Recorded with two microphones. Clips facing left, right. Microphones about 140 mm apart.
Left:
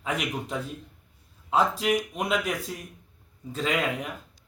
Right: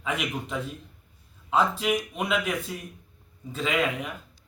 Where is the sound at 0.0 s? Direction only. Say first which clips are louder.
Even; centre (ahead or behind).